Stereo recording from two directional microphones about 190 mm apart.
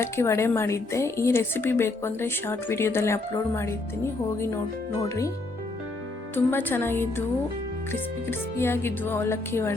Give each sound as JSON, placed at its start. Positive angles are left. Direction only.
{"t": 0.0, "sound": "a woman's voice", "side_deg": 15}
{"t": 5.0, "sound": "a woman's voice", "side_deg": 15}
{"t": 6.3, "sound": "a woman's voice", "side_deg": 10}